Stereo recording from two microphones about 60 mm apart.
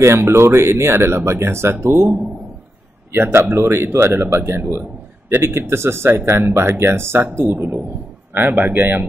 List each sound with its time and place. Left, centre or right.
0.0 s speech: right
8.3 s speech: right